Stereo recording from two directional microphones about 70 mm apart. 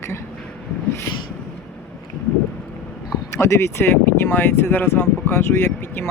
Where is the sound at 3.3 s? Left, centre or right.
Left.